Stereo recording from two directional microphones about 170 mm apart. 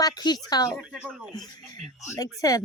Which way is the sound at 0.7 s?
5° right (ahead or behind).